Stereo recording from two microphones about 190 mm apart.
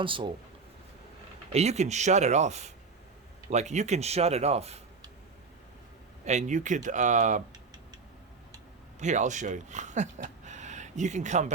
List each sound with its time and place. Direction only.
0.0 s speech: 25° right (ahead or behind)
1.5 s speech: 35° right (ahead or behind)
6.2 s speech: 40° right (ahead or behind)
9.0 s speech: 40° right (ahead or behind)